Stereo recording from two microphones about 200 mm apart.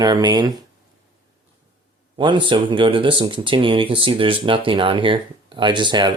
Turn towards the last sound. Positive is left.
turn(degrees=-25)  # may be behind; listen again after turning